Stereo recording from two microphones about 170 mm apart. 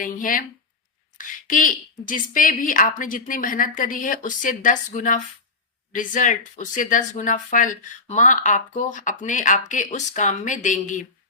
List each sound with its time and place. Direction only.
0.0 s speech: 55° left (ahead or behind)